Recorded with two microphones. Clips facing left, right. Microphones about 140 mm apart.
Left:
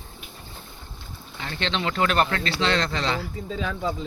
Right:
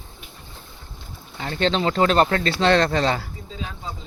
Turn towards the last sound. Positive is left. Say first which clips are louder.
# left 6 dB
turn(degrees=65)  # may be behind; listen again after turning